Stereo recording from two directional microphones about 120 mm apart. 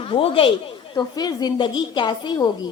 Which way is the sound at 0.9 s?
35° left (ahead or behind).